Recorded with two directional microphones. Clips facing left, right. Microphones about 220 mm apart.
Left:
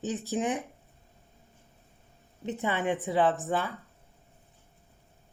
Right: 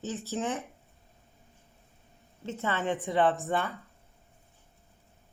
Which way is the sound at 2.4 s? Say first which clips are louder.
Left 2 dB; 15° left (ahead or behind).